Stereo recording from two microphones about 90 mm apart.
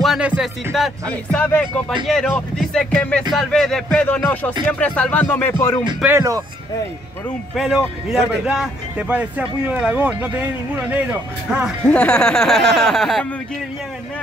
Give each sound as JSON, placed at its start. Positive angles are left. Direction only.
{"t": 0.7, "sound": "speech", "side_deg": 0}
{"t": 1.1, "sound": "music", "side_deg": 15}
{"t": 2.0, "sound": "speech", "side_deg": 0}
{"t": 2.5, "sound": "music", "side_deg": 5}
{"t": 3.3, "sound": "speech", "side_deg": 5}
{"t": 4.0, "sound": "speech", "side_deg": 20}
{"t": 4.6, "sound": "music", "side_deg": 15}
{"t": 5.3, "sound": "speech", "side_deg": 25}
{"t": 6.0, "sound": "speech", "side_deg": -30}
{"t": 7.6, "sound": "speech", "side_deg": -5}
{"t": 8.9, "sound": "speech", "side_deg": -15}
{"t": 11.8, "sound": "speech", "side_deg": 15}